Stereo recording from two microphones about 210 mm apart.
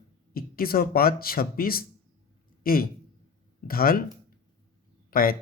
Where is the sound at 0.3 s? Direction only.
45° left (ahead or behind).